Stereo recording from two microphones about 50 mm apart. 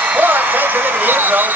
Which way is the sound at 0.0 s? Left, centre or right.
Right.